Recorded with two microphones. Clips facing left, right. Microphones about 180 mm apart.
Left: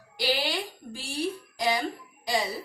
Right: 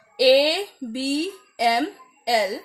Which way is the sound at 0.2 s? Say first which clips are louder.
Right 13 dB; 75° right (ahead or behind).